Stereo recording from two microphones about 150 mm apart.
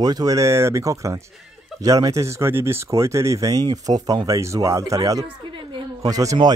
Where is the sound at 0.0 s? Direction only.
25° right (ahead or behind).